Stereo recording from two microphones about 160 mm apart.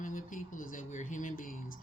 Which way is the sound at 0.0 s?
55° left (ahead or behind).